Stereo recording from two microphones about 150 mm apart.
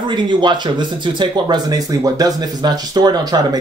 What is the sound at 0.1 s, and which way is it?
Speech, 30° right (ahead or behind).